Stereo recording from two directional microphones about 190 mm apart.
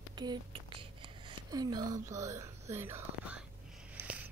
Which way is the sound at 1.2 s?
20° right (ahead or behind).